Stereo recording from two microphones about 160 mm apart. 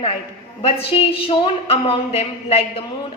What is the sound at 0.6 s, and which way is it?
A woman's voice, 35° left (ahead or behind).